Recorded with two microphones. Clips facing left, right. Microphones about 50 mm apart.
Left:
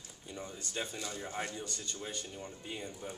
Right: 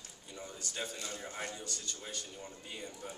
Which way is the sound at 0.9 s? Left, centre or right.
Left.